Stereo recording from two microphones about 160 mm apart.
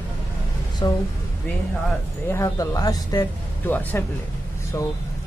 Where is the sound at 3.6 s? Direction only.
10° left (ahead or behind).